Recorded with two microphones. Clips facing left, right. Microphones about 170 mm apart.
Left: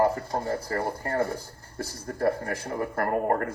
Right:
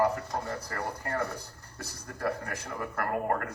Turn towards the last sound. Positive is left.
turn(degrees=35)  # may be behind; listen again after turning